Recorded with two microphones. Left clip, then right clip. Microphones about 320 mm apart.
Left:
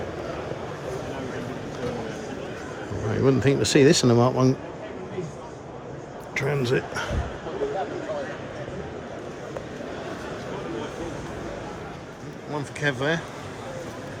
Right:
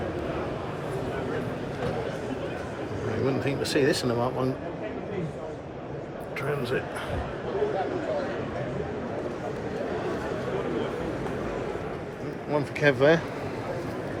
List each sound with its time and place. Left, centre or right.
3.2 s a man's voice: left
6.3 s a sound: left
12.8 s speech: centre